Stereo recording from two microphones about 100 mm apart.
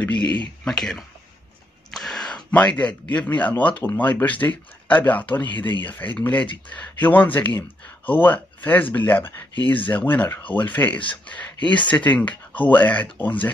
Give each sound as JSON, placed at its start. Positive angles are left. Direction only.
{"t": 0.0, "sound": "speech", "side_deg": 15}
{"t": 0.7, "sound": "speech", "side_deg": 5}